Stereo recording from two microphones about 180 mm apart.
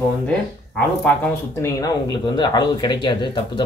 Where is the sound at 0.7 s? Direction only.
10° left (ahead or behind).